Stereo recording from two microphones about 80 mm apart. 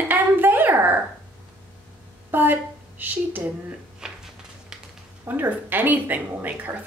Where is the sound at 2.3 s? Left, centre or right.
Right.